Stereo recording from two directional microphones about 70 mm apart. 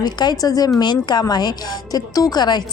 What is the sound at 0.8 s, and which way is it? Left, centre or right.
Speech, left.